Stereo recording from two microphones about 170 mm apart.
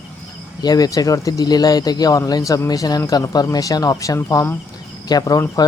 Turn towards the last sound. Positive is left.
turn(degrees=20)  # may be behind; listen again after turning